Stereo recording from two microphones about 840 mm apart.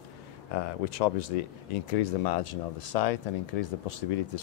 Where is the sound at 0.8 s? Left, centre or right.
Left.